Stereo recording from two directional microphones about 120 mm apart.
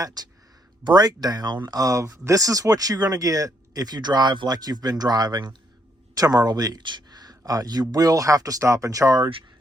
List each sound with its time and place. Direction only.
0.0 s speech: 35° right (ahead or behind)